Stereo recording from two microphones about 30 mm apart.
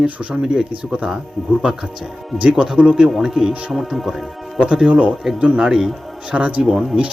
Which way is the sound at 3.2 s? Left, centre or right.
Centre.